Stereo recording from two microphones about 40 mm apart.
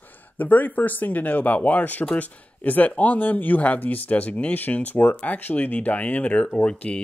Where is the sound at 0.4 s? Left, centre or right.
Left.